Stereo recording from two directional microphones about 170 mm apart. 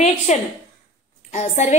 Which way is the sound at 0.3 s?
40° left (ahead or behind).